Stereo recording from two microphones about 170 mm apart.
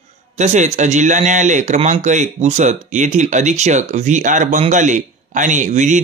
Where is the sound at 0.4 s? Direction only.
45° right (ahead or behind).